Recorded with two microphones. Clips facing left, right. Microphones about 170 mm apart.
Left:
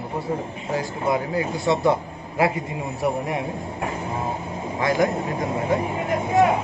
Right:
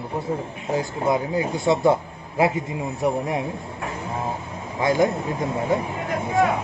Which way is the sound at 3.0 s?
20° right (ahead or behind).